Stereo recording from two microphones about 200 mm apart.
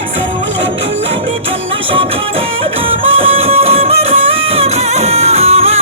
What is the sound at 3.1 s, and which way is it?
Music, 30° right (ahead or behind).